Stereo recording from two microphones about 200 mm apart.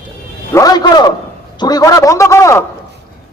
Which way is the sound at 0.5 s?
20° left (ahead or behind).